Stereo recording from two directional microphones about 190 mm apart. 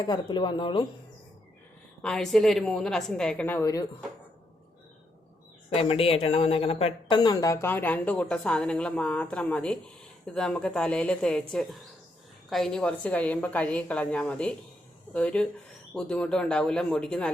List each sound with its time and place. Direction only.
0.0 s speech: 20° left (ahead or behind)
2.0 s a woman's voice: 5° left (ahead or behind)
5.7 s a woman's voice: 30° left (ahead or behind); by 11.4 s 5° left (ahead or behind)
12.5 s a woman's voice: centre (ahead or behind)